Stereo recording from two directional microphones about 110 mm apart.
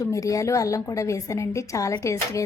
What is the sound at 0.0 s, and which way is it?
A woman's voice, 30° left (ahead or behind).